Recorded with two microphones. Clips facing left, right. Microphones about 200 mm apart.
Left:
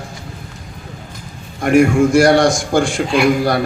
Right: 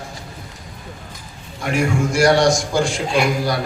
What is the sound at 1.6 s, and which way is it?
A man's voice, 55° left (ahead or behind).